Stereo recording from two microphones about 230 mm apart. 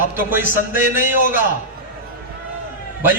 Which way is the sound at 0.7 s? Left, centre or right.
Left.